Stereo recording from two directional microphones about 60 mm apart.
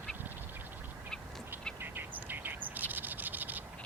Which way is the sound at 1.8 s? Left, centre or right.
Right.